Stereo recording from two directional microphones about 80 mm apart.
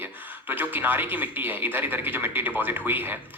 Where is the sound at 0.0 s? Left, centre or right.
Right.